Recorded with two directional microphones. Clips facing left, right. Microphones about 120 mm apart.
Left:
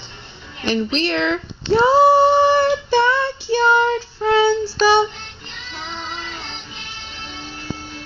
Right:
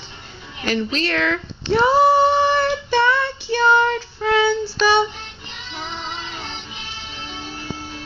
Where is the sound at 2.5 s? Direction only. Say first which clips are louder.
Left 3 dB; 25° left (ahead or behind).